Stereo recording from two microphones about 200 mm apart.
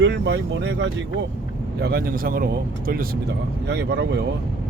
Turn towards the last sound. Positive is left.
turn(degrees=-55)  # may be behind; listen again after turning